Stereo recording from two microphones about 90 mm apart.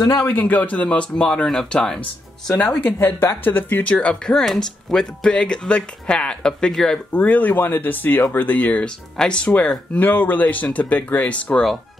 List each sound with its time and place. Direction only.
0.2 s speech: 20° left (ahead or behind)
3.0 s a woman's voice: 25° left (ahead or behind); by 7.0 s 5° left (ahead or behind)
7.1 s a woman's voice: 20° left (ahead or behind)